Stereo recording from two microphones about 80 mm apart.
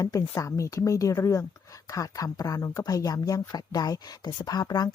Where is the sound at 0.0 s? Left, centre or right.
Left.